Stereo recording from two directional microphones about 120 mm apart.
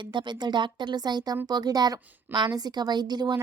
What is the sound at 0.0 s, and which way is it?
A woman's voice, 40° right (ahead or behind).